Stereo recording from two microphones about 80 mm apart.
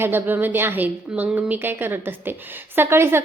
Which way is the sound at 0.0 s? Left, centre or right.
Right.